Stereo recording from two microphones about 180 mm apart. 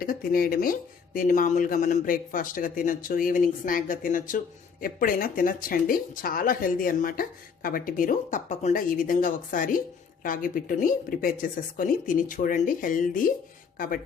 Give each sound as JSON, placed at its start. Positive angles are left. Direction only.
{"t": 0.0, "sound": "speech", "side_deg": 50}